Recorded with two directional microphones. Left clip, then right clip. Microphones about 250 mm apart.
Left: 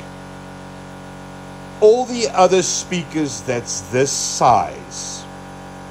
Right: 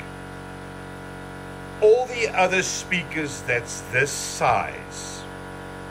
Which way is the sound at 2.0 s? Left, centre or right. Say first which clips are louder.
Left 6 dB; centre.